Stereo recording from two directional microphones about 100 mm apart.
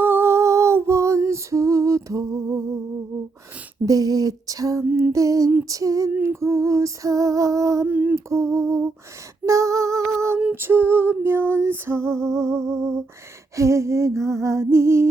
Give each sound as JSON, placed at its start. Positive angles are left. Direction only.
{"t": 0.0, "sound": "female singing", "side_deg": -25}
{"t": 3.8, "sound": "female singing", "side_deg": -35}
{"t": 7.9, "sound": "female singing", "side_deg": -15}
{"t": 8.1, "sound": "music", "side_deg": -30}
{"t": 9.5, "sound": "female singing", "side_deg": -30}
{"t": 10.5, "sound": "music", "side_deg": -20}